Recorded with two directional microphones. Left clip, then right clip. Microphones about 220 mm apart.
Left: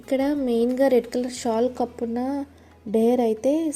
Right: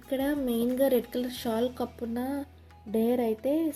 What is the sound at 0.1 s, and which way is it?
A woman's voice, 25° left (ahead or behind).